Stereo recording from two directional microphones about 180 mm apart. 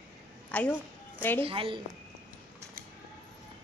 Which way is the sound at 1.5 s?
30° right (ahead or behind).